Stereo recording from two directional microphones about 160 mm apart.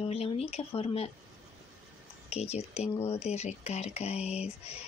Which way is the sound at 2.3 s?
40° left (ahead or behind).